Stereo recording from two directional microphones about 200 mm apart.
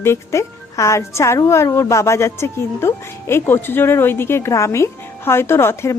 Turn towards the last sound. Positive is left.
turn(degrees=10)  # may be behind; listen again after turning